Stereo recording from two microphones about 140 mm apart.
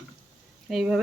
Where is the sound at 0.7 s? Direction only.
5° right (ahead or behind).